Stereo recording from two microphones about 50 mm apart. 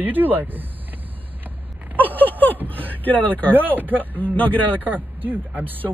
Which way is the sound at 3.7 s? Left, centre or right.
Right.